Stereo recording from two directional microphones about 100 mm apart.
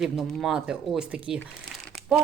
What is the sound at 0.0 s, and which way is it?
Speech, 5° right (ahead or behind).